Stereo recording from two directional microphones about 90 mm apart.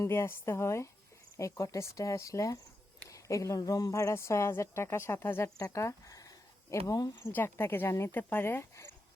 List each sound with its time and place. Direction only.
0.0 s speech: 30° left (ahead or behind)
3.1 s a sound: 35° left (ahead or behind)
3.6 s speech: 45° left (ahead or behind); by 5.5 s 25° left (ahead or behind)
5.5 s a sound: 35° left (ahead or behind)
6.8 s speech: 45° left (ahead or behind)
7.3 s speech: 25° left (ahead or behind)